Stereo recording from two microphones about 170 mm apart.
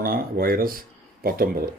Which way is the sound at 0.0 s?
60° right (ahead or behind).